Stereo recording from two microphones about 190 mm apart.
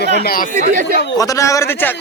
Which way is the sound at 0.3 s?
50° left (ahead or behind).